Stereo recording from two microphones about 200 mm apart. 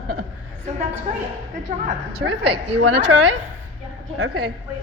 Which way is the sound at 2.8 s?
65° right (ahead or behind).